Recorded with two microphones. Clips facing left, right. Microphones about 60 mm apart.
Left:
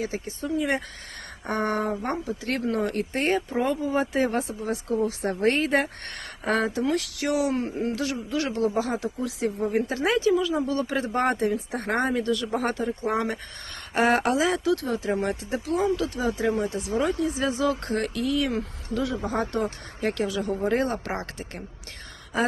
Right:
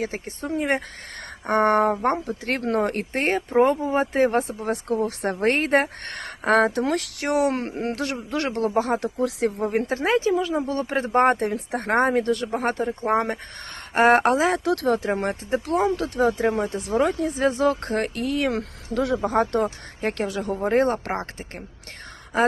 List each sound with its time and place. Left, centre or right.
0.0 s speech: right
7.9 s speech: right
9.9 s speech: right
15.4 s speech: right